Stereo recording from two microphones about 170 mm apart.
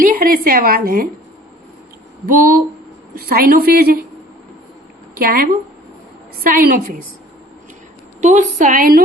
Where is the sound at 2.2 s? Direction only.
60° right (ahead or behind).